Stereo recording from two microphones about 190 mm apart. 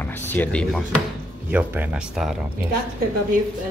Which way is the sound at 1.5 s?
10° right (ahead or behind).